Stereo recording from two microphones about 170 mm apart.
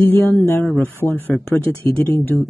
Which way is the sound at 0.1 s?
15° left (ahead or behind).